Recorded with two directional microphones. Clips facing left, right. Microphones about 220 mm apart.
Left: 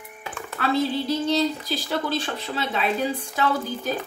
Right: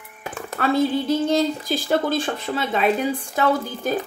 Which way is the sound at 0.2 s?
45° right (ahead or behind).